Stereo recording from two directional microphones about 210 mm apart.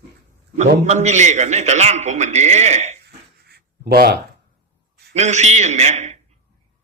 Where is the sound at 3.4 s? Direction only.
50° right (ahead or behind).